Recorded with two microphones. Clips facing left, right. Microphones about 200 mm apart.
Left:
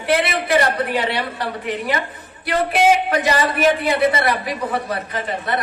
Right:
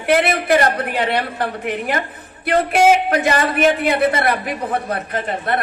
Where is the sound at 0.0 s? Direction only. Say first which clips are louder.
Right 3 dB; 50° right (ahead or behind).